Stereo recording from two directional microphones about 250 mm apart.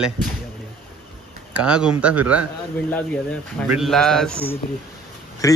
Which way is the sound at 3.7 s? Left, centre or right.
Centre.